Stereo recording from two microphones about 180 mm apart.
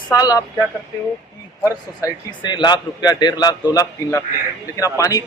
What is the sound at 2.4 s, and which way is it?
A man's voice, 25° left (ahead or behind).